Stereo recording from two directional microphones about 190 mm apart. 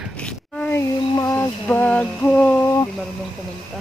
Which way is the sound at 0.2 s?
10° left (ahead or behind).